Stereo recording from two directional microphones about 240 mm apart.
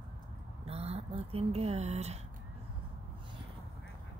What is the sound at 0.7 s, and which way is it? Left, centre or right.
Speech, right.